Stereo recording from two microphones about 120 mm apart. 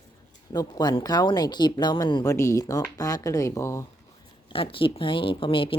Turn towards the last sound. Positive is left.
turn(degrees=45)  # may be behind; listen again after turning